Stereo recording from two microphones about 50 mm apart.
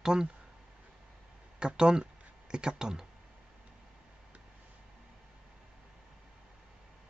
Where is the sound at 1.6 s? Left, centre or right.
Centre.